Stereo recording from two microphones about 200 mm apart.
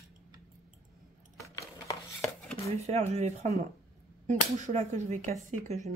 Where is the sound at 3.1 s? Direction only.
35° right (ahead or behind).